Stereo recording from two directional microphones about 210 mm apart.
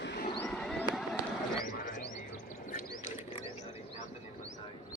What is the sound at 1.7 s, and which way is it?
Bird, 40° left (ahead or behind).